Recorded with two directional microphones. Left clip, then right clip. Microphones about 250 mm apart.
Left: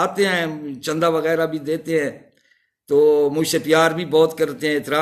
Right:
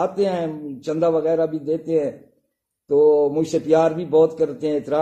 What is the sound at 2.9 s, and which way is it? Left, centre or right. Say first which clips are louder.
A man's voice: even; left.